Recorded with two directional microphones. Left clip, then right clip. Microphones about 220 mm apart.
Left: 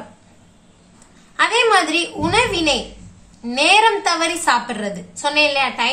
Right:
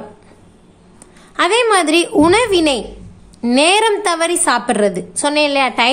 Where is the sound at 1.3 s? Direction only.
50° right (ahead or behind).